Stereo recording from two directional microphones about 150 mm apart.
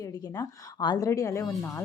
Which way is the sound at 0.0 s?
25° left (ahead or behind).